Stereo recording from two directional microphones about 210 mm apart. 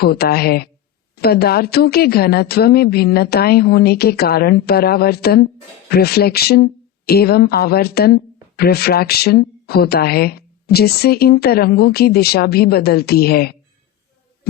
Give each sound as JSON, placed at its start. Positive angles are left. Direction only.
{"t": 0.0, "sound": "speech", "side_deg": 50}